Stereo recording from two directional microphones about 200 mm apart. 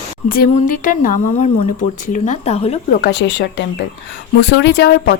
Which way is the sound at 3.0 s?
55° left (ahead or behind).